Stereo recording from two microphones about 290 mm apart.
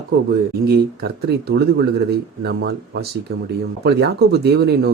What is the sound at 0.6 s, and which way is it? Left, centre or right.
Speech, right.